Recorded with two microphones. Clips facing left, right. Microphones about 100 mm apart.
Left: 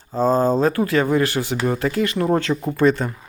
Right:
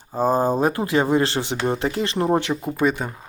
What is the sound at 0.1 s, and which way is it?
Speech, 15° right (ahead or behind).